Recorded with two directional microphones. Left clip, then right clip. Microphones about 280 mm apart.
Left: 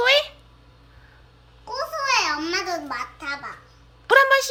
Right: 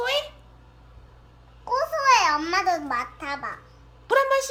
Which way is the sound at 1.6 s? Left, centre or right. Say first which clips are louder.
Right 5 dB; centre.